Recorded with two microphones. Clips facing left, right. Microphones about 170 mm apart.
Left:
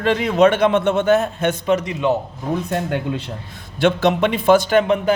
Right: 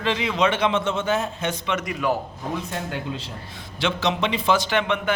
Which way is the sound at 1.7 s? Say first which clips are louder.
Left 6 dB; 30° left (ahead or behind).